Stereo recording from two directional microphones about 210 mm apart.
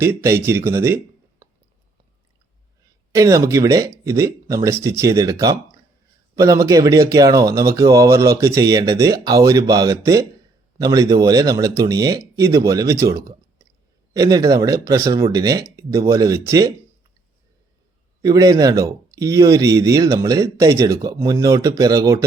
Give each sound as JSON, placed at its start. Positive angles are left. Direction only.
{"t": 0.0, "sound": "speech", "side_deg": -15}
{"t": 3.1, "sound": "speech", "side_deg": -15}
{"t": 18.2, "sound": "speech", "side_deg": -15}